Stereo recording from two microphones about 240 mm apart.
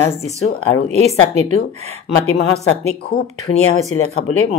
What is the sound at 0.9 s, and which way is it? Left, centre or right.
Speech, right.